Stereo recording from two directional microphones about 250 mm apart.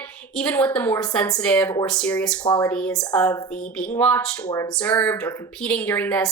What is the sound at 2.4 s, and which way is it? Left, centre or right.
Speech, centre.